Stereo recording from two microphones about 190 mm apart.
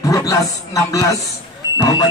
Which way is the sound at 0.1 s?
15° left (ahead or behind).